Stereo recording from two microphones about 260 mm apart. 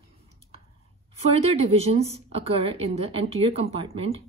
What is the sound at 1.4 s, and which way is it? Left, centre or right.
A woman's voice, right.